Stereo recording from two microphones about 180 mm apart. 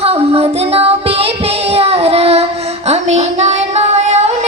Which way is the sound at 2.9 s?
35° right (ahead or behind).